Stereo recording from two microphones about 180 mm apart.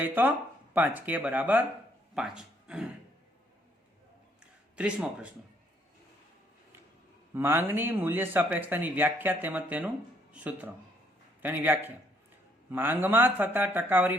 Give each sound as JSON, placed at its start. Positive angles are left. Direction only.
{"t": 0.0, "sound": "speech", "side_deg": -10}
{"t": 4.8, "sound": "speech", "side_deg": -5}
{"t": 7.3, "sound": "speech", "side_deg": -10}